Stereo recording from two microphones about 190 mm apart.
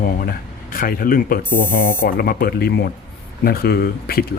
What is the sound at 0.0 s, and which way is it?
Speech, 50° left (ahead or behind).